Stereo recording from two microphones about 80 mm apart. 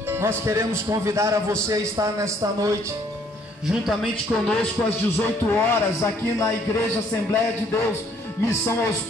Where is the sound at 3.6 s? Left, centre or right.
Centre.